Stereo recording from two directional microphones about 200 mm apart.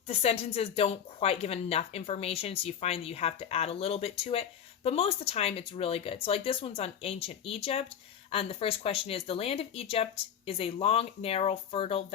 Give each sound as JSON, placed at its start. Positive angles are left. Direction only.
{"t": 0.1, "sound": "speech", "side_deg": 30}